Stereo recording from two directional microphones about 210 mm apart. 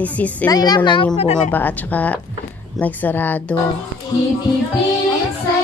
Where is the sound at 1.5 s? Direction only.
10° left (ahead or behind).